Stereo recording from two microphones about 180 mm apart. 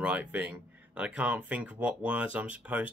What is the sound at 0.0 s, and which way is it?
Speech, 10° right (ahead or behind).